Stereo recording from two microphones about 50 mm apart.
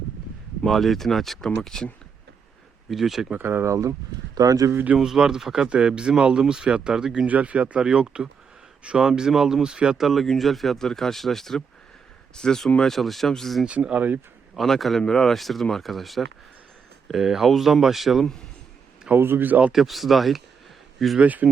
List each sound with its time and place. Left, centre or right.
0.6 s speech: centre
2.9 s speech: centre
3.3 s speech: right
4.9 s speech: centre
7.3 s speech: right
7.8 s speech: centre
10.0 s speech: centre
13.7 s speech: right
14.5 s speech: centre
19.1 s speech: right
19.7 s speech: centre
21.2 s speech: right